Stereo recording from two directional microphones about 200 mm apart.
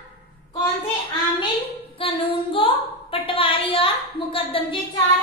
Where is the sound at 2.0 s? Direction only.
25° left (ahead or behind).